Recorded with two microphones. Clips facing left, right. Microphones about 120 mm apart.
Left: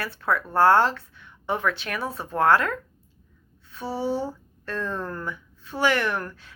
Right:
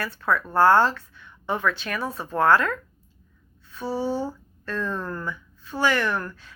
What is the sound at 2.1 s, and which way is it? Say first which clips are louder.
Speech: right 1 dB; 25° left (ahead or behind).